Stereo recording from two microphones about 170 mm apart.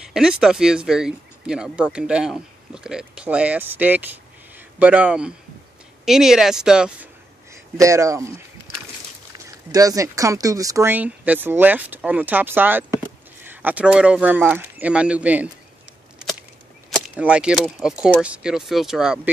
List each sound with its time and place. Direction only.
0.0 s speech: 5° right (ahead or behind)
7.7 s speech: 20° right (ahead or behind)
9.7 s speech: 20° right (ahead or behind)
17.1 s speech: 5° right (ahead or behind)